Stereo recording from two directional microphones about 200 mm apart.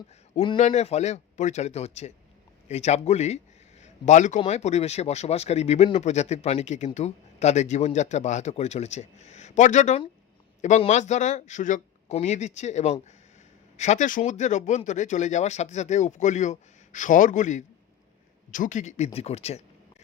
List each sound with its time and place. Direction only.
0.4 s speech: 30° left (ahead or behind)